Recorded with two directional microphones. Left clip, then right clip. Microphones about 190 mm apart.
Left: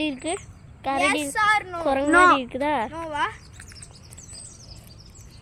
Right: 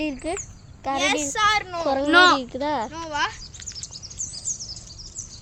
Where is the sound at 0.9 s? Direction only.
15° right (ahead or behind).